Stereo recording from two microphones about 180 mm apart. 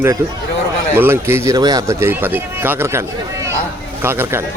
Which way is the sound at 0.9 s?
15° right (ahead or behind).